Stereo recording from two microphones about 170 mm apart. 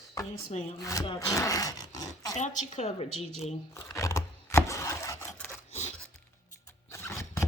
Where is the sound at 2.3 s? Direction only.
45° left (ahead or behind).